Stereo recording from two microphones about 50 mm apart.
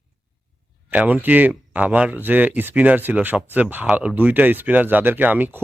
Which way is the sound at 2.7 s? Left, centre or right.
Right.